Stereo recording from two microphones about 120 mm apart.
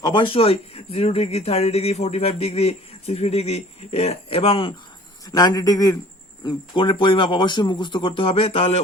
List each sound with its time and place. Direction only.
0.0 s speech: 40° left (ahead or behind)
5.2 s speech: 30° left (ahead or behind)
6.4 s speech: 40° left (ahead or behind); by 8.8 s 55° left (ahead or behind)